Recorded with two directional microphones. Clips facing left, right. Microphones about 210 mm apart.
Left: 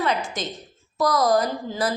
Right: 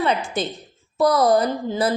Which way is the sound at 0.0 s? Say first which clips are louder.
Right 3 dB; 30° right (ahead or behind).